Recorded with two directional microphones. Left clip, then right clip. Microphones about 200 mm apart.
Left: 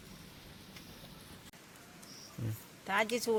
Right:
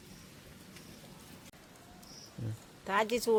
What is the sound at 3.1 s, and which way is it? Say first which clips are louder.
Speech: right 3 dB; 45° right (ahead or behind).